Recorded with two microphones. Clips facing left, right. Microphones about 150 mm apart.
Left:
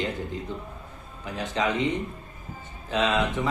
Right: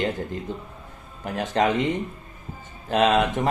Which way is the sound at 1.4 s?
50° right (ahead or behind).